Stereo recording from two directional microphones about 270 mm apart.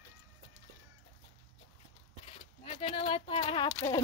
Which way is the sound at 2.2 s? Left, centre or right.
Left.